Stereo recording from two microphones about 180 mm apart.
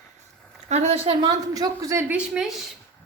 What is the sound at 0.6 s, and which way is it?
A woman's voice, 35° right (ahead or behind).